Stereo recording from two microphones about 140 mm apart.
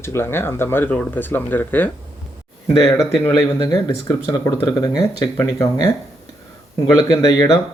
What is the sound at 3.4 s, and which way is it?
A man's voice, 25° left (ahead or behind).